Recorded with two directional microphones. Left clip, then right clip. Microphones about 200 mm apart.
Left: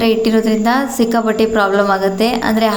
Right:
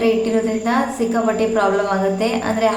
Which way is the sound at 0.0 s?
40° left (ahead or behind).